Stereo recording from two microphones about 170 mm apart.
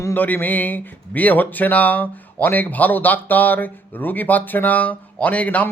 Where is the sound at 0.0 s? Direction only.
10° left (ahead or behind).